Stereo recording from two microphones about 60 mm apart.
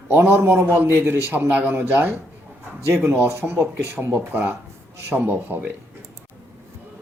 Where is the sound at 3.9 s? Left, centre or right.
Right.